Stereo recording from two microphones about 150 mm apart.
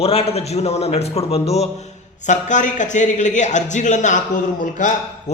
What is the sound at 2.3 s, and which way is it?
Speech, 55° left (ahead or behind).